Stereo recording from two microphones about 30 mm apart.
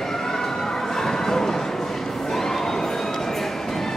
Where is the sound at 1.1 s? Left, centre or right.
Centre.